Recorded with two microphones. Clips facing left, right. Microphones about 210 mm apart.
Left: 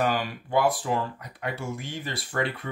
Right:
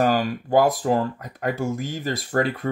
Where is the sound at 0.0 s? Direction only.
45° right (ahead or behind).